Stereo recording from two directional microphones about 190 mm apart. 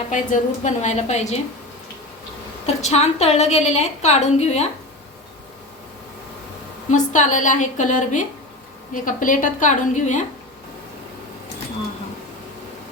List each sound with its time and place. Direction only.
0.1 s a woman's voice: 40° left (ahead or behind)
2.6 s a woman's voice: 35° left (ahead or behind)
6.9 s a woman's voice: 40° left (ahead or behind)